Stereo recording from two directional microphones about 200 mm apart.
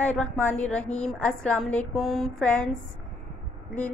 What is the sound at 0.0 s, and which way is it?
A woman's voice, 5° left (ahead or behind).